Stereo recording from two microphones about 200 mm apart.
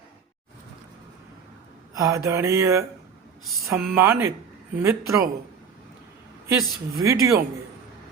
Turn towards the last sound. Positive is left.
turn(degrees=-15)  # may be behind; listen again after turning